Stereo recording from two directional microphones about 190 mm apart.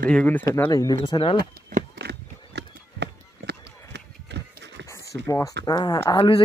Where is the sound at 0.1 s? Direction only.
10° left (ahead or behind).